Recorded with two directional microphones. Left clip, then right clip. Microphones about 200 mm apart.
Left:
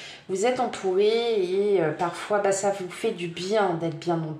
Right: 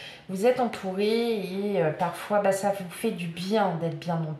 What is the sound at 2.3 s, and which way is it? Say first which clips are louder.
Speech: even; 30° left (ahead or behind).